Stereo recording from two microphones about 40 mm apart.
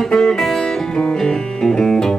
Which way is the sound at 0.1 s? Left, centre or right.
Centre.